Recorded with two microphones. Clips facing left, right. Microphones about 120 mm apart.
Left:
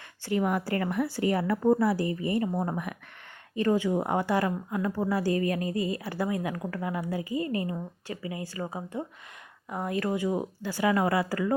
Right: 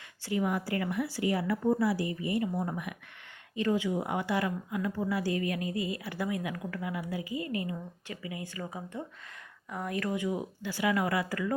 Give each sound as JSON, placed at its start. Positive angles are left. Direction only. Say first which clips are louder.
{"t": 0.3, "sound": "a woman's voice", "louder": "left 3 dB", "side_deg": 55}